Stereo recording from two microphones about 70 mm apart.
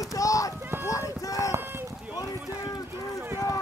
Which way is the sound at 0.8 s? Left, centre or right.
Left.